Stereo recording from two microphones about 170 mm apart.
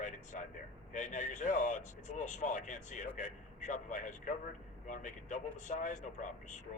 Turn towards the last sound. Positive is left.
turn(degrees=45)  # may be behind; listen again after turning